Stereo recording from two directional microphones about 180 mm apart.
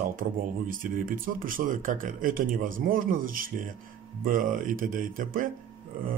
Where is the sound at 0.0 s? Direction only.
45° right (ahead or behind).